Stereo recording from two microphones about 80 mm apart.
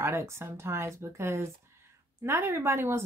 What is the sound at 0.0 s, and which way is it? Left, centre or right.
A woman's voice, right.